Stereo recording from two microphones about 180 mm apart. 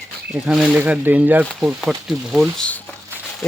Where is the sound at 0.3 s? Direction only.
5° right (ahead or behind).